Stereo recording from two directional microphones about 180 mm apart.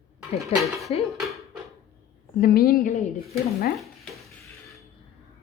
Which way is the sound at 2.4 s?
55° left (ahead or behind).